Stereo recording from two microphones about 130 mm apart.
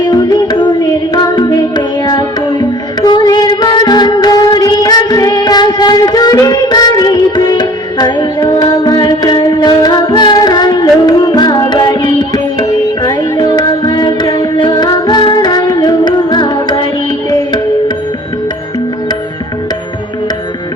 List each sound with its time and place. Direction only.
0.1 s music: 30° left (ahead or behind)